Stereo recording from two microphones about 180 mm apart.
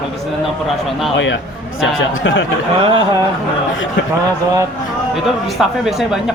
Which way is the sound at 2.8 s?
30° right (ahead or behind).